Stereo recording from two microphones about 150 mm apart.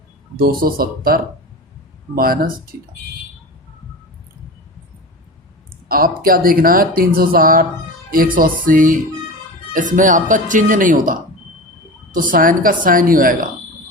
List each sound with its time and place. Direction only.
0.6 s speech: 80° right
5.9 s speech: 75° right (ahead or behind)
12.3 s speech: 65° right (ahead or behind)